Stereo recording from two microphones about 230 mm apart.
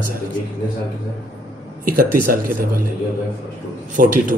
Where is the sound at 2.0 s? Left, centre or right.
Right.